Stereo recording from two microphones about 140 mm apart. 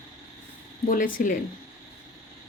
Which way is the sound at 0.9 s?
80° left.